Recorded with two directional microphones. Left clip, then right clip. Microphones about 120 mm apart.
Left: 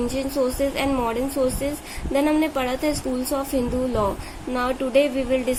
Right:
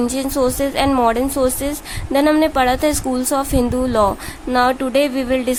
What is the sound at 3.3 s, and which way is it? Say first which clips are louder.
A woman's voice: right 6 dB; 55° right (ahead or behind).